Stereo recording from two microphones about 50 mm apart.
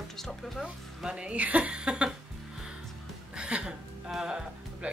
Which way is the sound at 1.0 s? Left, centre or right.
Right.